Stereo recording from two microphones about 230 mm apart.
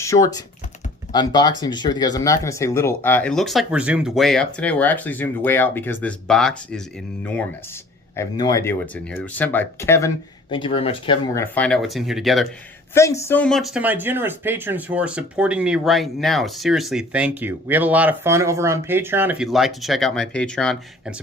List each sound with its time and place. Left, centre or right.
0.0 s speech: centre
8.1 s speech: centre
10.5 s speech: left
11.5 s speech: centre
12.9 s speech: centre